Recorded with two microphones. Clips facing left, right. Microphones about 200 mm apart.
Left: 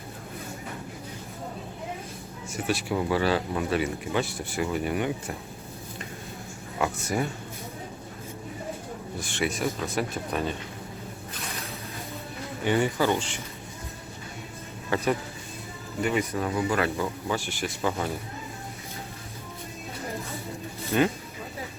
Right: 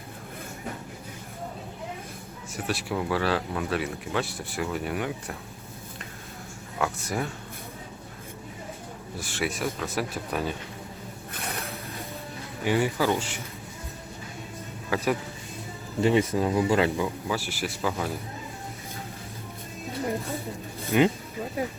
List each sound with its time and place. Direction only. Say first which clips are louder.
2.5 s speech: left 2 dB; centre (ahead or behind)
6.7 s speech: left 2 dB; centre (ahead or behind)
9.1 s speech: left 1 dB; 5° right (ahead or behind)
12.6 s speech: even; 5° right (ahead or behind)
14.8 s speech: left 1 dB; centre (ahead or behind)
16.0 s speech: right 4 dB; 30° right (ahead or behind)
17.2 s speech: even; 5° right (ahead or behind)
19.9 s music: right 6 dB; 30° right (ahead or behind)
20.9 s speech: right 2 dB; 10° right (ahead or behind)